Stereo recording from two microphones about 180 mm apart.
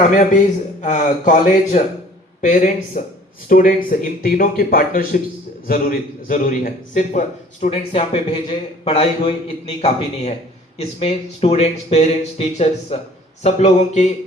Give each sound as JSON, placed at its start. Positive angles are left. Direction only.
{"t": 0.8, "sound": "a man's voice", "side_deg": 45}
{"t": 7.7, "sound": "a man's voice", "side_deg": 30}